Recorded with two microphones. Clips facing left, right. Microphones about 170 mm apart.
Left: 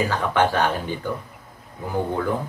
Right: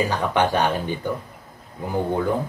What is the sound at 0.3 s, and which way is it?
Speech, 15° right (ahead or behind).